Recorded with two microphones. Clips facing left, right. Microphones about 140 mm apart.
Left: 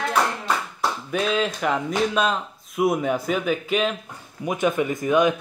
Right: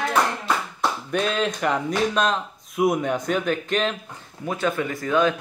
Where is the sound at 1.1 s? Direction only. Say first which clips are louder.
Left 1 dB; centre (ahead or behind).